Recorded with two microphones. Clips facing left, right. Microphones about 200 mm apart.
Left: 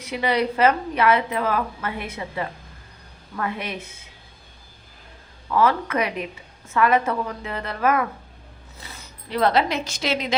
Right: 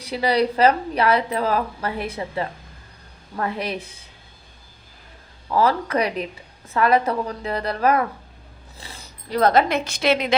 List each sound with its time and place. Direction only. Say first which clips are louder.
0.0 s a woman's voice: right 2 dB; 35° right (ahead or behind)
5.5 s a woman's voice: right 1 dB; 35° right (ahead or behind); by 10.3 s 60° right (ahead or behind)